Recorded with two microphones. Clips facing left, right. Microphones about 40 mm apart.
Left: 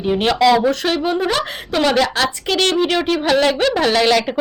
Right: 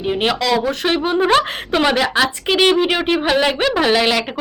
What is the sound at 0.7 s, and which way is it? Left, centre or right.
Speech, right.